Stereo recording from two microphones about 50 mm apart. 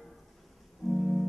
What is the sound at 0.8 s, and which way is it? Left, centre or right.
Music, centre.